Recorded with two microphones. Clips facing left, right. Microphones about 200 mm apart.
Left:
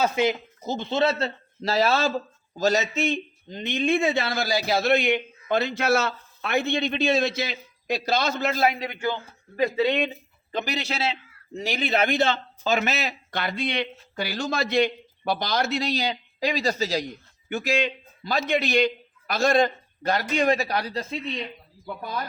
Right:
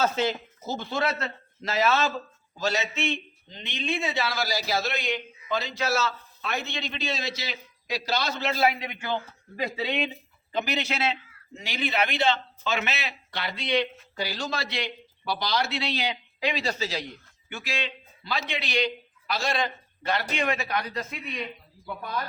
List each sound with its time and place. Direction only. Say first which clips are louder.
0.0 s speech: left 3 dB; 15° left (ahead or behind); by 8.9 s 45° left (ahead or behind)
10.5 s a man's voice: even; 35° left (ahead or behind)